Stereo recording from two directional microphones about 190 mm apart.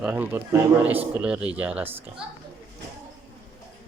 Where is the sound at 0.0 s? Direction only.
10° right (ahead or behind).